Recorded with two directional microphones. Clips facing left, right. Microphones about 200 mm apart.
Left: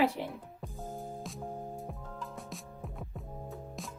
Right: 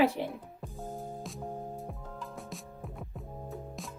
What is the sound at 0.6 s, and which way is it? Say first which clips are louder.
Music: even; 5° right (ahead or behind).